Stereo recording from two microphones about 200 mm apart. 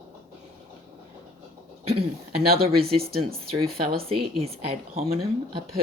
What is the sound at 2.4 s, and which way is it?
Speech, 50° right (ahead or behind).